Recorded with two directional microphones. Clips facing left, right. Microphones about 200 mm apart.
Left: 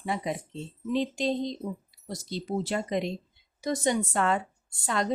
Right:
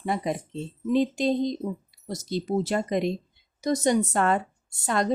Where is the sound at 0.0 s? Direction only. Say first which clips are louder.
Right 3 dB; 45° right (ahead or behind).